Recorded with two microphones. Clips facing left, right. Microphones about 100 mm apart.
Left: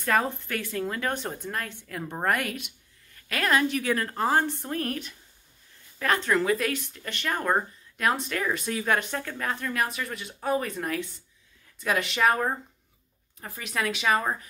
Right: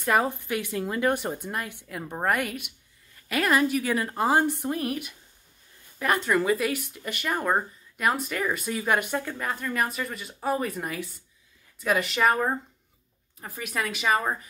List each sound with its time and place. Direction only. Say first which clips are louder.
0.0 s speech: right 1 dB; 15° right (ahead or behind)